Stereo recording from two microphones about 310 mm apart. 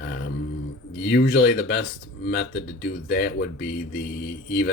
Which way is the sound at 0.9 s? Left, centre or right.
Left.